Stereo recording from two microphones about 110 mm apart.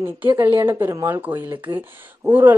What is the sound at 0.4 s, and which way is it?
Speech, 20° right (ahead or behind).